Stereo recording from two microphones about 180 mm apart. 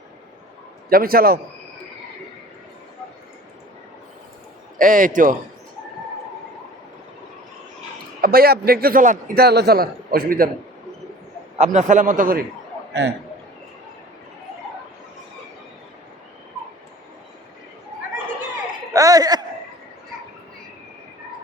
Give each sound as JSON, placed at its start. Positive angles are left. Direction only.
{"t": 0.9, "sound": "a man's voice", "side_deg": -55}
{"t": 4.8, "sound": "a man's voice", "side_deg": -45}
{"t": 8.2, "sound": "a man's voice", "side_deg": -55}
{"t": 11.5, "sound": "a man's voice", "side_deg": -40}
{"t": 18.9, "sound": "a sound", "side_deg": -20}